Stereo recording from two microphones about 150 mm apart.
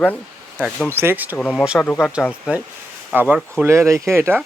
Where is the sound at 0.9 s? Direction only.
15° right (ahead or behind).